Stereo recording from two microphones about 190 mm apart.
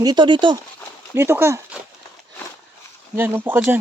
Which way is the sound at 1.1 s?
10° right (ahead or behind).